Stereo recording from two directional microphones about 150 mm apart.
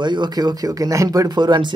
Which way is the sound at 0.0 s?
30° right (ahead or behind).